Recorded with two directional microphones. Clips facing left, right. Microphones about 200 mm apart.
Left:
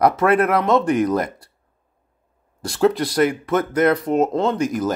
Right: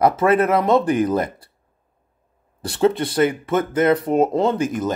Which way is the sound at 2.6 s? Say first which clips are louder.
Even; centre (ahead or behind).